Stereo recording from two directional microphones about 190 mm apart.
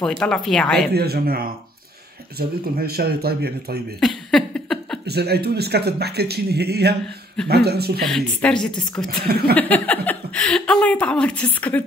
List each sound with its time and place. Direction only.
0.0 s a woman's voice: 5° left (ahead or behind)
0.9 s speech: 55° right (ahead or behind)
4.0 s a sound: 5° left (ahead or behind)
5.0 s speech: 60° right (ahead or behind)
8.0 s a woman's voice: 5° left (ahead or behind)
9.2 s speech: 55° right (ahead or behind)
9.6 s speech: 10° left (ahead or behind)